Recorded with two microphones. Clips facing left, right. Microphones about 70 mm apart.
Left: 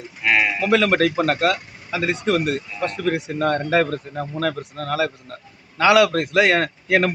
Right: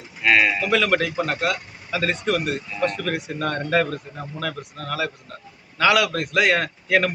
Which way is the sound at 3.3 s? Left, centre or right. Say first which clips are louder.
Left 2 dB; left.